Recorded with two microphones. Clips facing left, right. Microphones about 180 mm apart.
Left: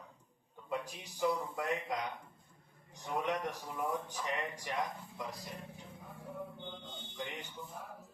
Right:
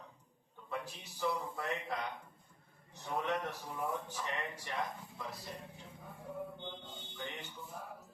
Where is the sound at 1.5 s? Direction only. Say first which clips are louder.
Left 3 dB; 15° left (ahead or behind).